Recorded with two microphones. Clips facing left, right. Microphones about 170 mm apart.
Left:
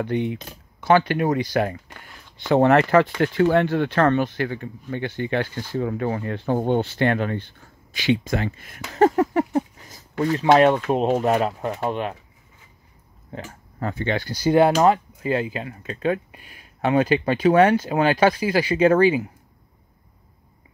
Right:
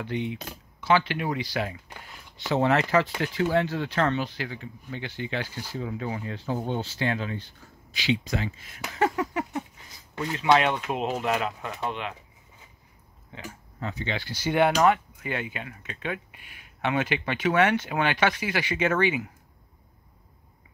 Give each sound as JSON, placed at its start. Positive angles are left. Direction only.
{"t": 0.0, "sound": "speech", "side_deg": 50}
{"t": 13.3, "sound": "speech", "side_deg": 55}